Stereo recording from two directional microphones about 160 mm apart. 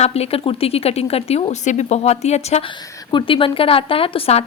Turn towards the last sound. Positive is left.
turn(degrees=35)  # may be behind; listen again after turning